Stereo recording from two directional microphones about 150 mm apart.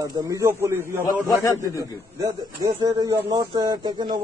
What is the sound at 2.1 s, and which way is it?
Speech, 20° right (ahead or behind).